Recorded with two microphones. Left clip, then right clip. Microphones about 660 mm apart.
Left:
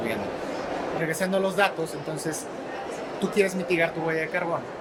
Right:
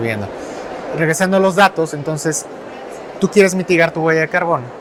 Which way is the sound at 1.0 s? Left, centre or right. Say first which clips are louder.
Right 13 dB; right.